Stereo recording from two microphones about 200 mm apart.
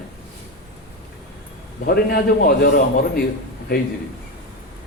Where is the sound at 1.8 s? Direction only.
50° left (ahead or behind).